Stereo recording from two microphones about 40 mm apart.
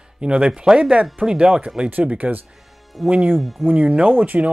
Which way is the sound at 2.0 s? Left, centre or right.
Right.